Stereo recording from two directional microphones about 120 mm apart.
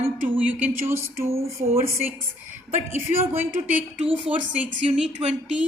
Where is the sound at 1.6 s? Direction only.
90° right.